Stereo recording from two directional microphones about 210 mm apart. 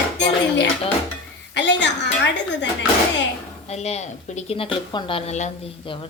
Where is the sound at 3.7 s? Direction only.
30° left (ahead or behind).